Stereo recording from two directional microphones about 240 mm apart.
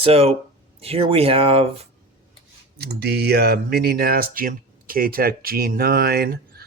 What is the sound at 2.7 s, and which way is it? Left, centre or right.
Speech, right.